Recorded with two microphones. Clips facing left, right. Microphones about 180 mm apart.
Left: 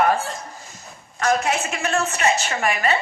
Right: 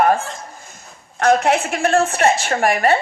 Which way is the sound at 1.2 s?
60° right (ahead or behind).